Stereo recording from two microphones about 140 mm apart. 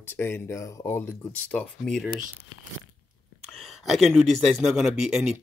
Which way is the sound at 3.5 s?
Centre (ahead or behind).